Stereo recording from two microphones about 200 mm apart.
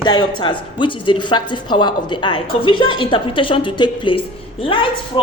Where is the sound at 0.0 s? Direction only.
20° left (ahead or behind).